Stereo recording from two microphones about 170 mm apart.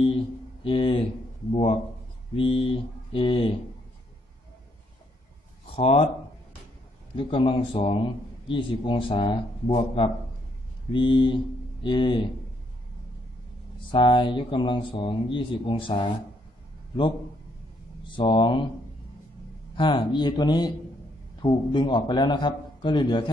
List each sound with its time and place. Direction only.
0.7 s a man's voice: 30° left (ahead or behind)
5.8 s a man's voice: 30° left (ahead or behind)
7.2 s a man's voice: 30° left (ahead or behind)
13.9 s speech: 30° left (ahead or behind)
18.0 s speech: 30° left (ahead or behind)
19.7 s speech: 30° left (ahead or behind)